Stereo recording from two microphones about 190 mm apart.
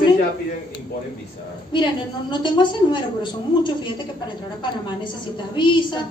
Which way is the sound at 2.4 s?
25° left (ahead or behind).